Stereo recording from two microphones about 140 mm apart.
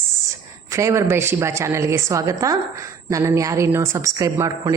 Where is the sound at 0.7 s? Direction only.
20° right (ahead or behind).